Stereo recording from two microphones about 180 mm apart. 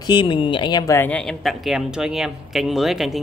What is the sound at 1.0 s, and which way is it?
Speech, 5° left (ahead or behind).